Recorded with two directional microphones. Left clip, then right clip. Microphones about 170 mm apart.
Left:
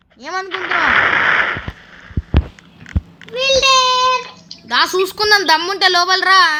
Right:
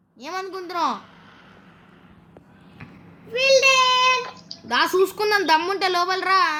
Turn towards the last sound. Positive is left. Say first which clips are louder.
# left 8 dB
turn(degrees=-5)  # may be behind; listen again after turning